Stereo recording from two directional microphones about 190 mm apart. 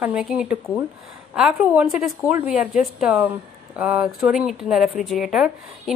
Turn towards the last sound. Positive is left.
turn(degrees=-5)  # may be behind; listen again after turning